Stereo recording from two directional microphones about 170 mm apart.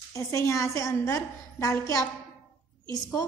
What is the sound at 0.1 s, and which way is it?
A woman's voice, 20° left (ahead or behind).